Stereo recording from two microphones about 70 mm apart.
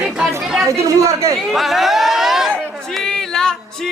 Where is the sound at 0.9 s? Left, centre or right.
Right.